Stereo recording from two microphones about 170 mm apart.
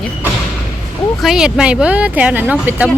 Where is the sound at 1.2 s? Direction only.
5° right (ahead or behind).